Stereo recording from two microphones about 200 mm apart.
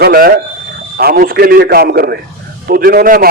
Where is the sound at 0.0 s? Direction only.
50° right (ahead or behind).